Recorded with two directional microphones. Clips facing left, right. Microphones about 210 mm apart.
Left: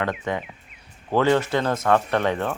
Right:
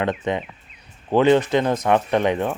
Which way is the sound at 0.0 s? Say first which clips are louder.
Right 3 dB; 20° right (ahead or behind).